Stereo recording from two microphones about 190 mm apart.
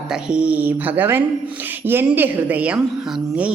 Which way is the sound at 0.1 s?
5° right (ahead or behind).